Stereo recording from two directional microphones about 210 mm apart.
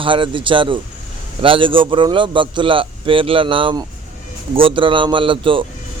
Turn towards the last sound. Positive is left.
turn(degrees=-25)  # may be behind; listen again after turning